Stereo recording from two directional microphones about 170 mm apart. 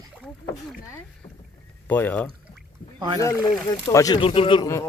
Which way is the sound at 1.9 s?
10° left (ahead or behind).